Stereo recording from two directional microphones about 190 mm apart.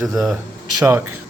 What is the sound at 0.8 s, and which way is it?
Speech, 15° right (ahead or behind).